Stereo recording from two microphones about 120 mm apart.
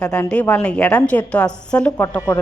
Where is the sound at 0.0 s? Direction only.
10° left (ahead or behind).